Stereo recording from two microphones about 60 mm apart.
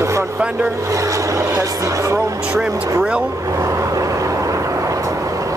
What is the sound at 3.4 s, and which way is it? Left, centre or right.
Vehicle, right.